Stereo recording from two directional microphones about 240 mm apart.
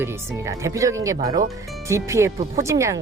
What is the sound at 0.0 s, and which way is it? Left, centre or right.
Speech, centre.